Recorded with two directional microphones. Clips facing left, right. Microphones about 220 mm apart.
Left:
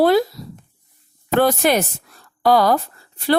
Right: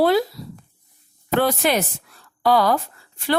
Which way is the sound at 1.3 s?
45° left (ahead or behind).